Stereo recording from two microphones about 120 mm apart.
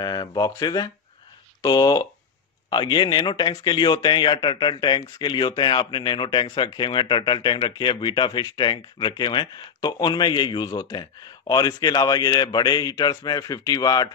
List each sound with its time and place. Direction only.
0.0 s speech: 35° left (ahead or behind)